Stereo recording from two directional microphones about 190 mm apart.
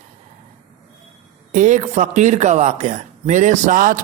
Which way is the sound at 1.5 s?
40° right (ahead or behind).